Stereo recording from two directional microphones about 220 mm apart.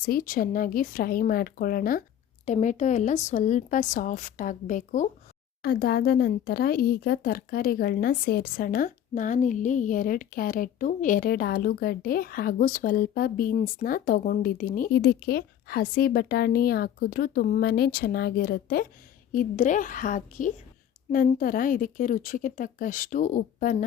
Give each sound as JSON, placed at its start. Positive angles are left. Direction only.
{"t": 0.0, "sound": "a woman's voice", "side_deg": 40}